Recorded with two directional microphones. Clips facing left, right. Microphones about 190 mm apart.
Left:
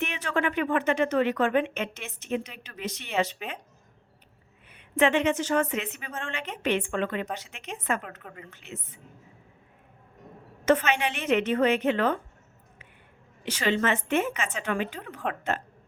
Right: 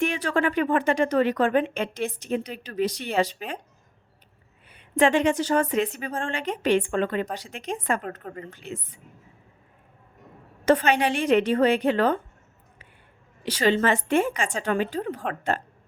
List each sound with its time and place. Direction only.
0.0 s speech: 35° right (ahead or behind)
4.7 s speech: 35° right (ahead or behind)
10.7 s speech: 35° right (ahead or behind)
13.4 s speech: 35° right (ahead or behind)